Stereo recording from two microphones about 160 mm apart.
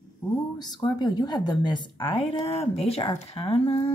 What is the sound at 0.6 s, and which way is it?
Speech, 25° left (ahead or behind).